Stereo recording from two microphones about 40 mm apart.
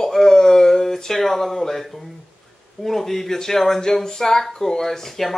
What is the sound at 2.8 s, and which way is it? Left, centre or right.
Speech, centre.